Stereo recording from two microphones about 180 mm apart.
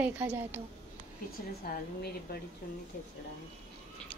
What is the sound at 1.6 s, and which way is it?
Speech, 55° left (ahead or behind).